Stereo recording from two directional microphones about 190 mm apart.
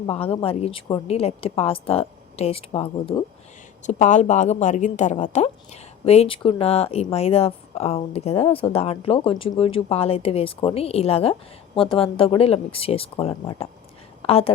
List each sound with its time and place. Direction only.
0.1 s a woman's voice: 30° left (ahead or behind)